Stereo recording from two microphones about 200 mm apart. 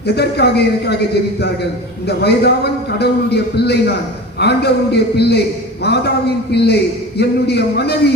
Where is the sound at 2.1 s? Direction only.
55° left (ahead or behind).